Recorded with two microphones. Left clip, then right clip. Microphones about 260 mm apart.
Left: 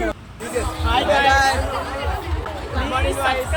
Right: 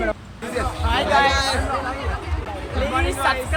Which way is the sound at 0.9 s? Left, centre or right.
Centre.